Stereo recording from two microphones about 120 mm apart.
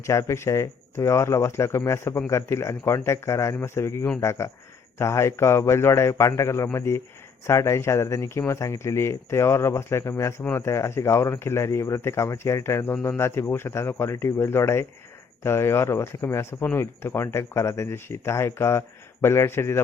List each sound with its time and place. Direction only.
0.0 s speech: 25° left (ahead or behind)